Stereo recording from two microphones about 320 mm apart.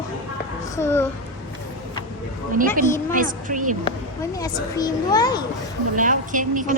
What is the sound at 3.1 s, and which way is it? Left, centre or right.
Speech, right.